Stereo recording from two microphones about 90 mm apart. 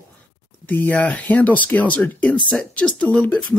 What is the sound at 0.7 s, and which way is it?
Speech, 20° left (ahead or behind).